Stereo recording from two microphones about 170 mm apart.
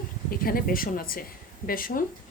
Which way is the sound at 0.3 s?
60° left (ahead or behind).